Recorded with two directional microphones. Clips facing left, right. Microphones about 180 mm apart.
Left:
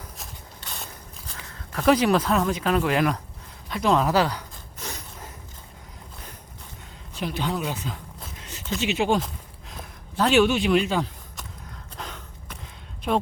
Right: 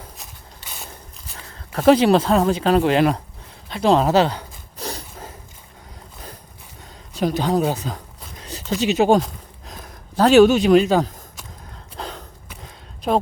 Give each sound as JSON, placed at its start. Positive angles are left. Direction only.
{"t": 0.2, "sound": "walk", "side_deg": -5}
{"t": 1.7, "sound": "speech", "side_deg": -30}
{"t": 3.7, "sound": "a sound", "side_deg": -30}
{"t": 7.1, "sound": "speech", "side_deg": -40}
{"t": 11.9, "sound": "gasp", "side_deg": -35}